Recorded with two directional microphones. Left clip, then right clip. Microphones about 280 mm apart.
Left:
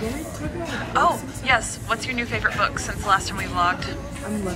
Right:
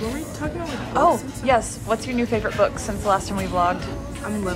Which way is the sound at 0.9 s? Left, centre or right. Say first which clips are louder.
Right 2 dB; right.